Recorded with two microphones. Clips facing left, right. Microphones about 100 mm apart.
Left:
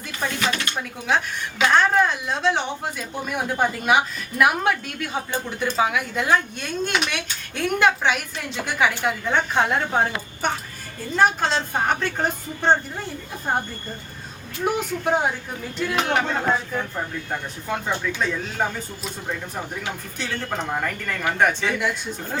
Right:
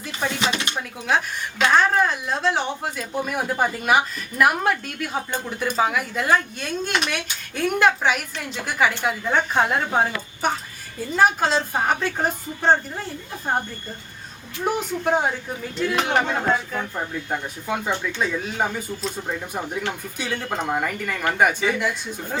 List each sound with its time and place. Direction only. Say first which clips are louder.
0.3 s speech: left 1 dB; 20° right (ahead or behind)
0.8 s speech: even; centre (ahead or behind)
20.1 s speech: even; 10° right (ahead or behind)